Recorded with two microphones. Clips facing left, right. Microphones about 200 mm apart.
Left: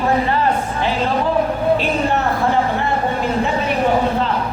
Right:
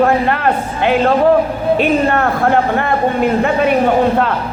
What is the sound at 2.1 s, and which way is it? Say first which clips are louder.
Speech: right 4 dB; 60° right (ahead or behind).